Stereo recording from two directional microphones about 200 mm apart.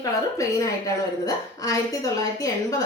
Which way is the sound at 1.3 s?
15° left (ahead or behind).